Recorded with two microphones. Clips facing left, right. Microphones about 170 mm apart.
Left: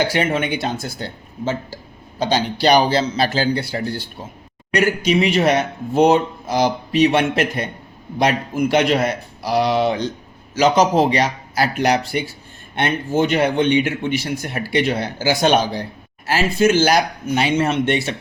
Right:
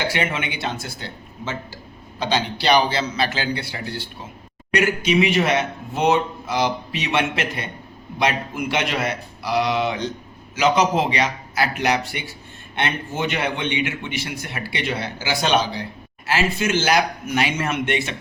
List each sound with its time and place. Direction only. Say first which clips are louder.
0.1 s a man's voice: left 5 dB; 40° left (ahead or behind)